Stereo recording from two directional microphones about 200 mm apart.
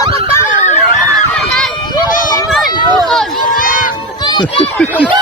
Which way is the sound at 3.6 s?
40° left (ahead or behind).